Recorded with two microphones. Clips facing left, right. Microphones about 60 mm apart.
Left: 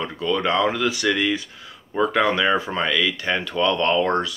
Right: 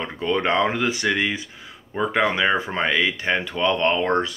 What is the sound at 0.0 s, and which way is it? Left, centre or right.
Speech, right.